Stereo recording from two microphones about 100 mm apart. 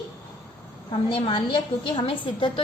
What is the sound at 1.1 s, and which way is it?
A woman's voice, 55° left (ahead or behind).